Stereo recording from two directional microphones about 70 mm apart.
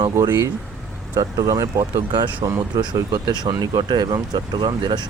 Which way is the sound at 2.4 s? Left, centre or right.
Right.